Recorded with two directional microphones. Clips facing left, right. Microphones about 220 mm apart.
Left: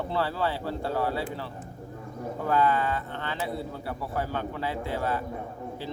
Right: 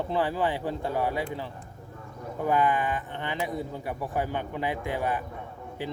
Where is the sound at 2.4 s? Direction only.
15° right (ahead or behind).